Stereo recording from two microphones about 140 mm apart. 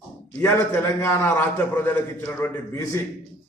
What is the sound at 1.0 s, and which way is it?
A man's voice, 15° left (ahead or behind).